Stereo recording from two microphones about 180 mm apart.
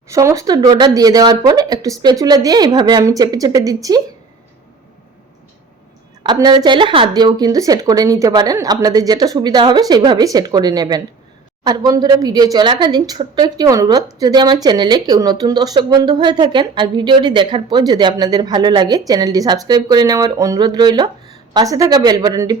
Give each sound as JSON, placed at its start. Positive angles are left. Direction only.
{"t": 0.1, "sound": "a woman's voice", "side_deg": -15}
{"t": 6.2, "sound": "a woman's voice", "side_deg": -25}